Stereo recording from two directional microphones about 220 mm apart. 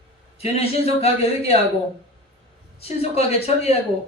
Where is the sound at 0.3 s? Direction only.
25° left (ahead or behind).